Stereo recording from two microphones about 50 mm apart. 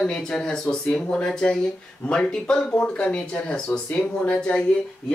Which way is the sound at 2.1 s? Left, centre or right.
Centre.